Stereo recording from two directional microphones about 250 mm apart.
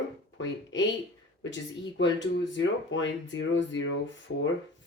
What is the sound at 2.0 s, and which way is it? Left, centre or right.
Speech, left.